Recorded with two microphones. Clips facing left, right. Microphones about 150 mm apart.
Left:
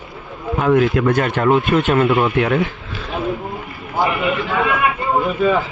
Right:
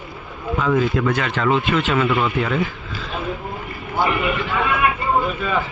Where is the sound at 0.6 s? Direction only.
60° left (ahead or behind).